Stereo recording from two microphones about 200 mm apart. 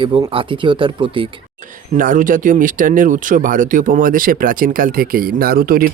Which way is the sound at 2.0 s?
40° right (ahead or behind).